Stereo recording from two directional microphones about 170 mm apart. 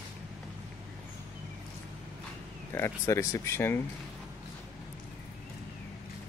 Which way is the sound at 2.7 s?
15° left (ahead or behind).